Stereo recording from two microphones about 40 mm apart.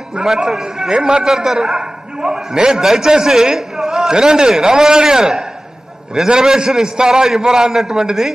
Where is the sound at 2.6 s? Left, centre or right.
Centre.